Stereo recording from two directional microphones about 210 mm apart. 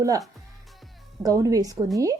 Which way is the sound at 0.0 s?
15° right (ahead or behind).